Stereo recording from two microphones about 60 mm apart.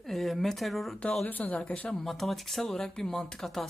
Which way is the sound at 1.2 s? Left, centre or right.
Left.